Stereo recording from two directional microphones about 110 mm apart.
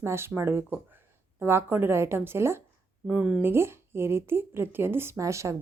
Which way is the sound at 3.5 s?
20° right (ahead or behind).